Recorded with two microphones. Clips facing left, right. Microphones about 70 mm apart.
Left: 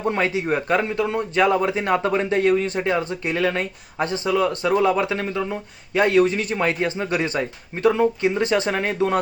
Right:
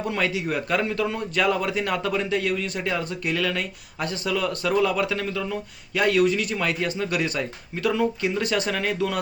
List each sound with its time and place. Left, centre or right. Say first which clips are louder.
0.0 s a man's voice: left 4 dB; left